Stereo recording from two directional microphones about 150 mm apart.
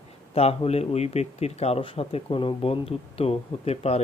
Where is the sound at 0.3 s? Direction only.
45° left (ahead or behind).